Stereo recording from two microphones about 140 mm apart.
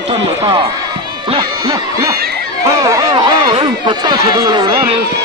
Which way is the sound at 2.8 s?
25° right (ahead or behind).